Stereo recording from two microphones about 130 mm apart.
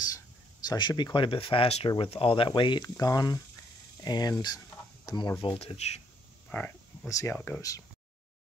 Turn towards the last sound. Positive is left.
turn(degrees=20)  # may be behind; listen again after turning